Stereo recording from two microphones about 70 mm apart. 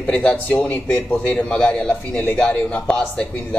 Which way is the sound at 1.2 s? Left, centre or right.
Centre.